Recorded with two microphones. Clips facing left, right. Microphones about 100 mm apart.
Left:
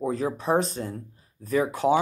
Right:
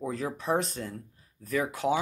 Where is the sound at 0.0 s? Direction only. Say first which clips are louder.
Left 6 dB; 25° left (ahead or behind).